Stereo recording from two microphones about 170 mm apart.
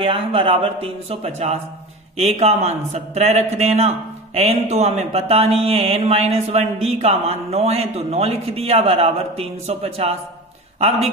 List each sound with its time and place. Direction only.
0.0 s speech: 30° right (ahead or behind)